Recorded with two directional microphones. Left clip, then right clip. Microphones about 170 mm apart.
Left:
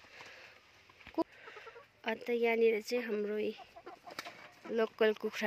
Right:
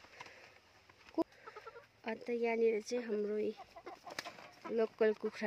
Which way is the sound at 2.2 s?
Centre (ahead or behind).